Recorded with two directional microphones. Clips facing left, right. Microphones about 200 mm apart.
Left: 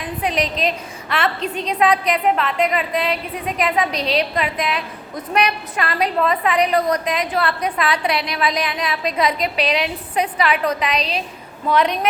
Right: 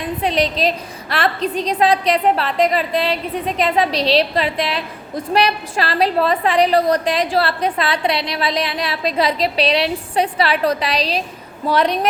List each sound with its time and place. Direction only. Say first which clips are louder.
0.2 s a woman's voice: right 2 dB; 30° right (ahead or behind)